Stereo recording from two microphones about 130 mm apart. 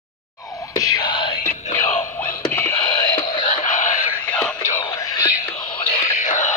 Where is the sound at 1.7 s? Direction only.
20° left (ahead or behind).